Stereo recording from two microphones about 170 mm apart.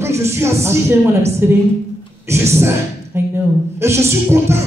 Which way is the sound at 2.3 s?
15° right (ahead or behind).